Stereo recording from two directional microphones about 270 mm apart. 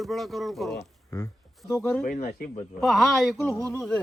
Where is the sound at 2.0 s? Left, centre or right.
Left.